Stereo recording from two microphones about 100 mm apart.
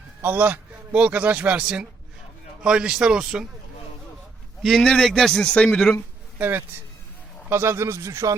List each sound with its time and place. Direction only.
0.2 s a man's voice: 20° right (ahead or behind)
4.6 s a man's voice: 5° left (ahead or behind)
6.4 s speech: 20° right (ahead or behind)